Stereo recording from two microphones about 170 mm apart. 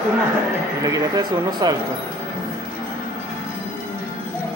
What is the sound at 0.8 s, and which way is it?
Speech, 20° right (ahead or behind).